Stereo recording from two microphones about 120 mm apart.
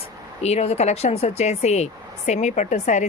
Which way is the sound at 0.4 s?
65° left (ahead or behind).